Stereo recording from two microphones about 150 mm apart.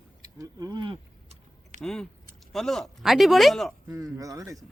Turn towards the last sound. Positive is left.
turn(degrees=-25)  # may be behind; listen again after turning